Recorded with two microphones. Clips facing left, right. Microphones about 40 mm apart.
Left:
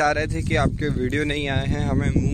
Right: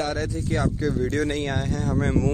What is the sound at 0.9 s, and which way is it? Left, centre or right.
Speech, left.